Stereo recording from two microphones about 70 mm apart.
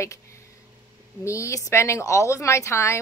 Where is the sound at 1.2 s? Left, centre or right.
Left.